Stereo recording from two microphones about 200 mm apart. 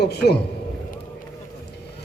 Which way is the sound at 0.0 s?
55° left (ahead or behind).